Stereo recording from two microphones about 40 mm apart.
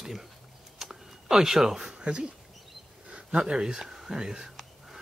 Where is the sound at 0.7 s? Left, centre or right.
Centre.